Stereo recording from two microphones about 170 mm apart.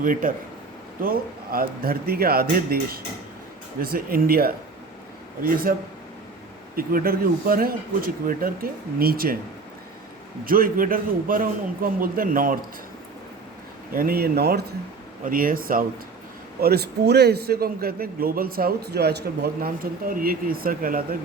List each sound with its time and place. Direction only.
0.0 s a man's voice: 55° right (ahead or behind)
6.7 s a man's voice: 60° right (ahead or behind)
10.4 s a man's voice: 60° right (ahead or behind)
13.9 s a man's voice: 60° right (ahead or behind)
15.2 s a man's voice: 55° right (ahead or behind)
16.6 s a man's voice: 65° right (ahead or behind)